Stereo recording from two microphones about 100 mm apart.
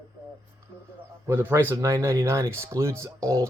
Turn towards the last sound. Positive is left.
turn(degrees=-30)  # may be behind; listen again after turning